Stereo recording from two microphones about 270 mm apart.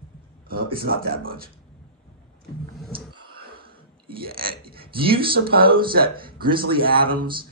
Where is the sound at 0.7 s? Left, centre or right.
Right.